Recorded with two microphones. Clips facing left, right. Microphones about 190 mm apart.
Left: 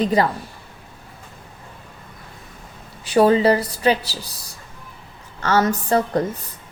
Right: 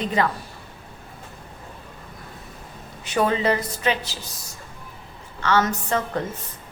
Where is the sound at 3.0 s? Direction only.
35° left (ahead or behind).